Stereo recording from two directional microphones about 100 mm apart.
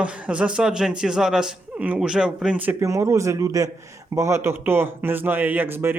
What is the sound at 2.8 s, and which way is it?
A man's voice, 30° right (ahead or behind).